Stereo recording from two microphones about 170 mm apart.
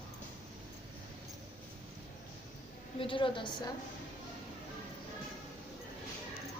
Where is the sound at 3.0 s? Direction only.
30° left (ahead or behind).